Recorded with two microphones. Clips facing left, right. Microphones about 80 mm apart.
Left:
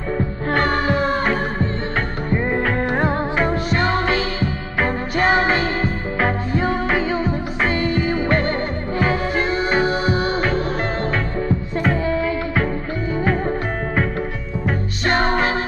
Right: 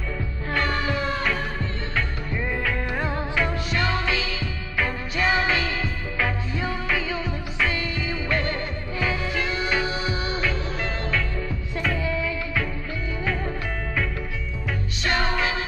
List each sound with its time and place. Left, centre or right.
0.5 s music: left
15.0 s music: left